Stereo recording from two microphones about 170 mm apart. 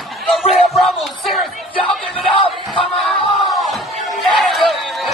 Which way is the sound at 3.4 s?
Centre (ahead or behind).